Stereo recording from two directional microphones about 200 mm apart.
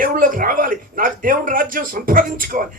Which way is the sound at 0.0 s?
45° right (ahead or behind).